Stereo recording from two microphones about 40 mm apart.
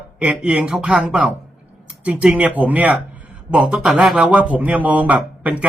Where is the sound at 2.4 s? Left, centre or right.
Right.